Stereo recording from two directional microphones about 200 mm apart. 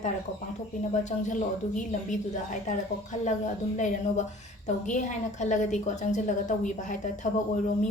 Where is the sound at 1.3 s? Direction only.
40° left (ahead or behind).